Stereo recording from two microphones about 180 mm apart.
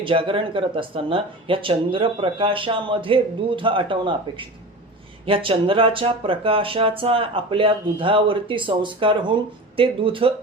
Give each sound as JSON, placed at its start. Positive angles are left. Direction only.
{"t": 0.0, "sound": "speech", "side_deg": -30}